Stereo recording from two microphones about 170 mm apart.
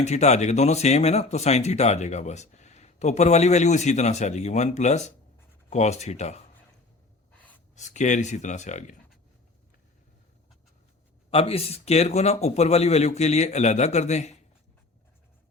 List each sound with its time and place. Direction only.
0.0 s speech: 40° left (ahead or behind)
7.8 s speech: 45° left (ahead or behind)
11.3 s speech: 35° left (ahead or behind)